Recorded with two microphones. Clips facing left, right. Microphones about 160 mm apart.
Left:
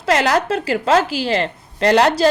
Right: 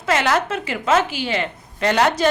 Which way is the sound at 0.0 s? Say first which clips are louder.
Left 3 dB; 35° left (ahead or behind).